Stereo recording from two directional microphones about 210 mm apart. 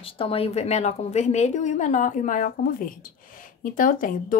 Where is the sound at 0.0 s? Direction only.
25° left (ahead or behind).